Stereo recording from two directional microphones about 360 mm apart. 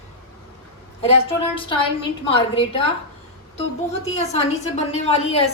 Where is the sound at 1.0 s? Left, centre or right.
Centre.